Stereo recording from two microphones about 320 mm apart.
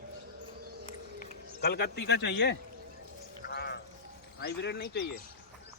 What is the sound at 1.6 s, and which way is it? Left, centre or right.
A man's voice, left.